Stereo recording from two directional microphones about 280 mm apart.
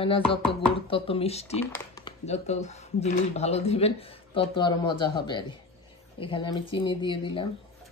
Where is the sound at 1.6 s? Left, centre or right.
Centre.